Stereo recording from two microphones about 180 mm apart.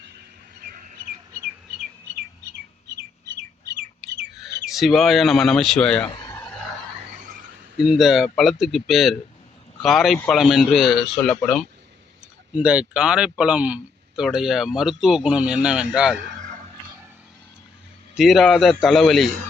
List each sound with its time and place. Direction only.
0.6 s bird: 50° right (ahead or behind)
4.7 s speech: centre (ahead or behind)
7.8 s speech: centre (ahead or behind)
18.2 s speech: centre (ahead or behind)